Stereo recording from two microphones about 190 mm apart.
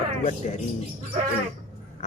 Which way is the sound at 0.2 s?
40° left (ahead or behind).